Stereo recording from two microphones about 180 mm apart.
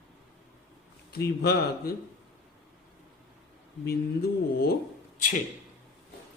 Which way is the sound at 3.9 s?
60° left (ahead or behind).